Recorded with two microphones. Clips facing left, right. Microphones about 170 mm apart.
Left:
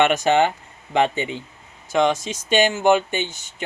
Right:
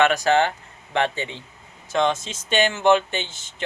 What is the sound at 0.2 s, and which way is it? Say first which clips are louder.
Speech: left 2 dB; 15° left (ahead or behind).